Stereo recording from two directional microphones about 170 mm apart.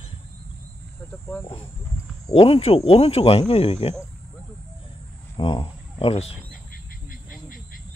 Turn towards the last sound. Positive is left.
turn(degrees=35)  # may be behind; listen again after turning